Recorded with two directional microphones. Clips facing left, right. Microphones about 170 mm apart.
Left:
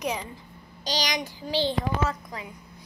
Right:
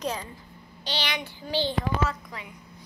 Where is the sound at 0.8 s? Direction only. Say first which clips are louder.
Left 3 dB; 40° left (ahead or behind).